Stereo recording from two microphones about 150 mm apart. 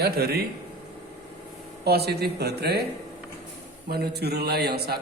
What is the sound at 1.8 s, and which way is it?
Speech, 90° right.